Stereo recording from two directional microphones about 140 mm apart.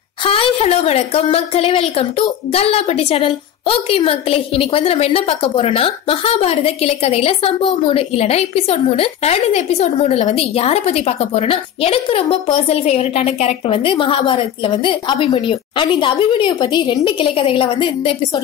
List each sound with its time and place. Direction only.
0.2 s a woman's voice: 40° left (ahead or behind)